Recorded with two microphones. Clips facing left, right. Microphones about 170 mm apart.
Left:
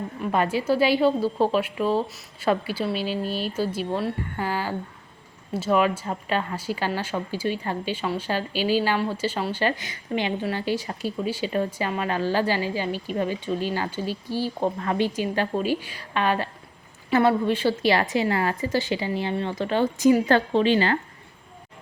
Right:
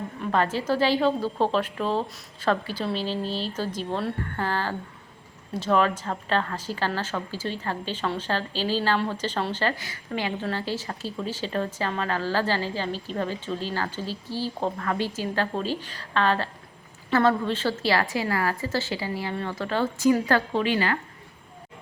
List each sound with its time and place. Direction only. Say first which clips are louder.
0.2 s a woman's voice: left 1 dB; 10° left (ahead or behind); by 21.0 s 30° left (ahead or behind)